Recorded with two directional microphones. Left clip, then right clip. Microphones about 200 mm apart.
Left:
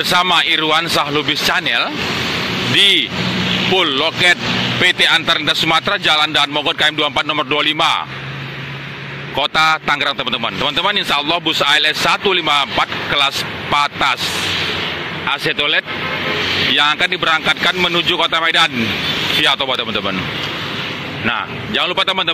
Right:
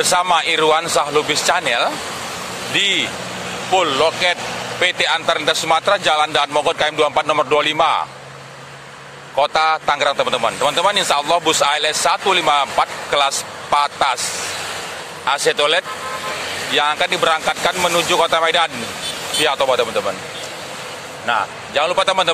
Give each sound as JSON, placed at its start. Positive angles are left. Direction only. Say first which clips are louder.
{"t": 0.0, "sound": "a man's voice", "louder": "left 2 dB", "side_deg": -10}
{"t": 9.8, "sound": "a man's voice", "louder": "even", "side_deg": -10}
{"t": 15.3, "sound": "speech", "louder": "right 1 dB", "side_deg": -30}
{"t": 16.3, "sound": "vehicle", "louder": "left 7 dB", "side_deg": -60}
{"t": 16.7, "sound": "a man's voice", "louder": "right 1 dB", "side_deg": -10}
{"t": 21.7, "sound": "a man's voice", "louder": "right 1 dB", "side_deg": -10}